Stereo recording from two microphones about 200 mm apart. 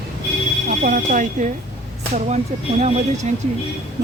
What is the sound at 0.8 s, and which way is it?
Speech, 40° right (ahead or behind).